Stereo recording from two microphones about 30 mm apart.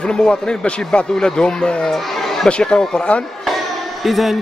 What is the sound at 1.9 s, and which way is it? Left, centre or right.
Speech, centre.